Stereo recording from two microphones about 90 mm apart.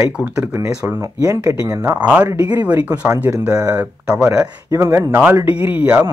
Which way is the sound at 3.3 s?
40° right (ahead or behind).